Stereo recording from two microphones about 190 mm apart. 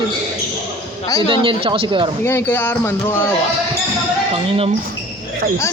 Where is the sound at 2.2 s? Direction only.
10° left (ahead or behind).